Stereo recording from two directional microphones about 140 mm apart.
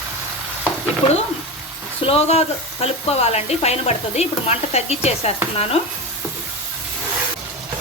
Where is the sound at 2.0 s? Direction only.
45° left (ahead or behind).